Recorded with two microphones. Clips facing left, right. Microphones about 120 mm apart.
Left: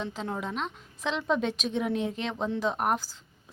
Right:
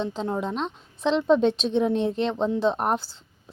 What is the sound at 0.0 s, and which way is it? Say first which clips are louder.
Speech: right 6 dB; 30° right (ahead or behind).